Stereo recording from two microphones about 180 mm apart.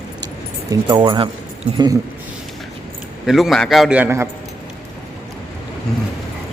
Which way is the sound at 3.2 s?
Centre (ahead or behind).